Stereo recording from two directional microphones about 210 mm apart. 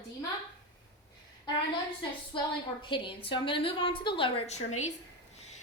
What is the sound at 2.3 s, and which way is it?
A woman's voice, 25° left (ahead or behind).